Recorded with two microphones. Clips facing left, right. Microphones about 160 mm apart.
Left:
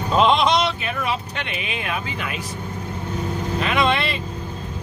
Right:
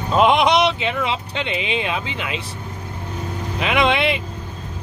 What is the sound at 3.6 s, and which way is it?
Speech, 15° right (ahead or behind).